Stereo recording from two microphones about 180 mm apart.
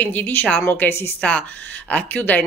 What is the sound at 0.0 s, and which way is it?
Speech, 10° left (ahead or behind).